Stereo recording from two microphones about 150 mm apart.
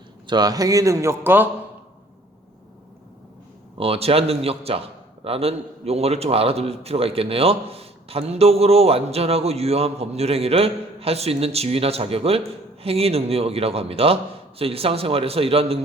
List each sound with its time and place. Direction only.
0.3 s a man's voice: 25° right (ahead or behind)
3.8 s a man's voice: 40° right (ahead or behind)